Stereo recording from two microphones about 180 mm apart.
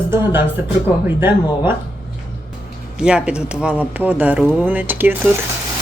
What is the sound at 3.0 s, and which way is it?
Speech, 5° right (ahead or behind).